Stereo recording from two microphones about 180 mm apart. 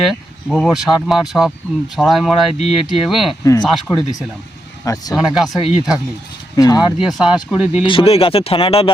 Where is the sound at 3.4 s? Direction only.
20° left (ahead or behind).